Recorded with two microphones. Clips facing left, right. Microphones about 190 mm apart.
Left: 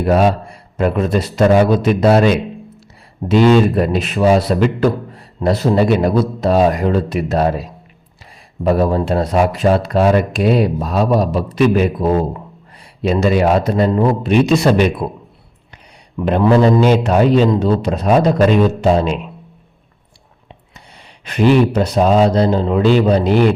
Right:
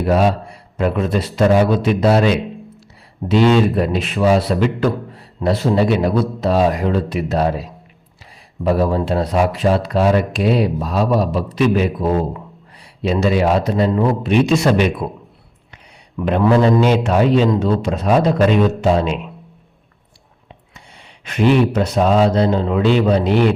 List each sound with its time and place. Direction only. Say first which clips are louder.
0.0 s a man's voice: left 2 dB; 50° left (ahead or behind); by 15.0 s 35° left (ahead or behind)
16.2 s a man's voice: left 2 dB; 35° left (ahead or behind)
19.0 s speech: left 2 dB; centre (ahead or behind)
20.7 s a sound: left 1 dB; 35° left (ahead or behind)
21.7 s a man's voice: left 2 dB; 35° left (ahead or behind)